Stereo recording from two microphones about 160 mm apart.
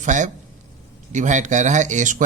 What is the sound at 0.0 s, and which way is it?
A man's voice, 50° right (ahead or behind).